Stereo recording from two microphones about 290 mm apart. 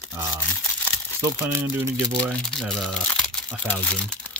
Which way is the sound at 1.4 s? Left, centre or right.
Centre.